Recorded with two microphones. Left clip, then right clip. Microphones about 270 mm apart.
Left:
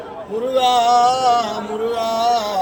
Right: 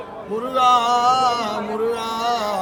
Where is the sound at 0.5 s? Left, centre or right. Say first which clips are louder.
Left 2 dB; centre.